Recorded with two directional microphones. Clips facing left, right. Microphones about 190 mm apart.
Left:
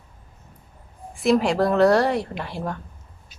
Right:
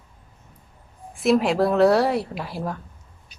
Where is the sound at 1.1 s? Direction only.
Centre (ahead or behind).